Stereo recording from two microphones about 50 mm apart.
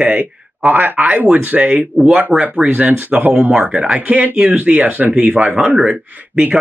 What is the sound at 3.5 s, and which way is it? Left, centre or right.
Speech, right.